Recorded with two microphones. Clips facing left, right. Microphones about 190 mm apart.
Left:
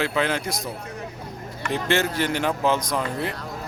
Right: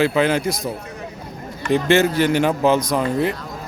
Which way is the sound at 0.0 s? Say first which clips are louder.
Right 7 dB; 10° right (ahead or behind).